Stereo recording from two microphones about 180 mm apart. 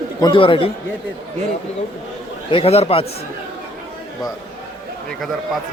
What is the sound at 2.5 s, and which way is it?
Speech, 30° left (ahead or behind).